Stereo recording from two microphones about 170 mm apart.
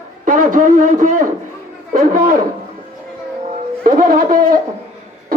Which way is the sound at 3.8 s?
55° right (ahead or behind).